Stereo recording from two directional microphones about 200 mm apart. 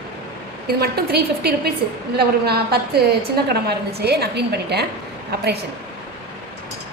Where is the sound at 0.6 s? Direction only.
50° right (ahead or behind).